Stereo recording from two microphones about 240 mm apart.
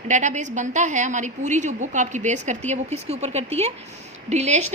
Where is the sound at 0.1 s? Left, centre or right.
Right.